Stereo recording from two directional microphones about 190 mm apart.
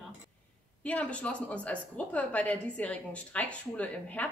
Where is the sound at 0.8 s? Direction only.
5° left (ahead or behind).